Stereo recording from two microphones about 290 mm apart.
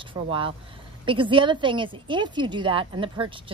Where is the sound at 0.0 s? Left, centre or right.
Centre.